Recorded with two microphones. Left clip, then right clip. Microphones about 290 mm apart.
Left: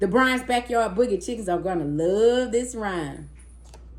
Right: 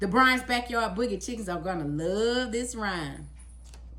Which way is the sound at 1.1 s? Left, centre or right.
Centre.